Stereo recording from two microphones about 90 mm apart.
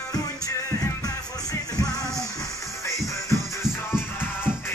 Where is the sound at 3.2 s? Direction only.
35° left (ahead or behind).